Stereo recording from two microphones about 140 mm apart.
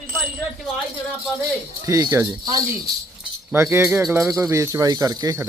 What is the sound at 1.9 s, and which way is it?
Speech, 25° right (ahead or behind).